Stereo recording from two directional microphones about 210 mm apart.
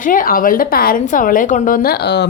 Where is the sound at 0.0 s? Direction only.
40° left (ahead or behind).